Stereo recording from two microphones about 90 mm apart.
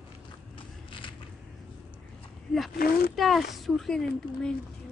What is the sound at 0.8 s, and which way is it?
Creak, 70° left (ahead or behind).